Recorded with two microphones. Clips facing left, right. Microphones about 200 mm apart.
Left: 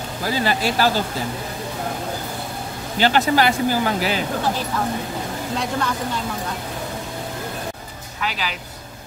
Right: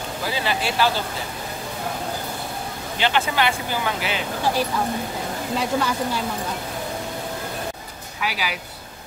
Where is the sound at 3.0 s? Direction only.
40° left (ahead or behind).